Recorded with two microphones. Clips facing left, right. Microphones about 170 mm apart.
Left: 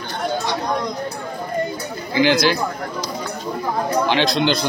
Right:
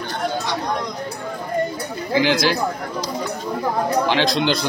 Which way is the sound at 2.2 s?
Centre (ahead or behind).